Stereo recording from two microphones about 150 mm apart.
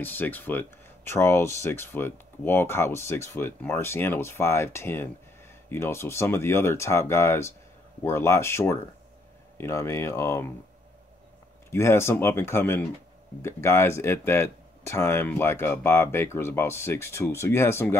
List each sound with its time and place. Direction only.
0.0 s speech: 10° left (ahead or behind)
11.7 s speech: 15° left (ahead or behind)